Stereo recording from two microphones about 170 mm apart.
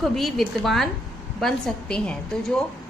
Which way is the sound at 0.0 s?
Centre (ahead or behind).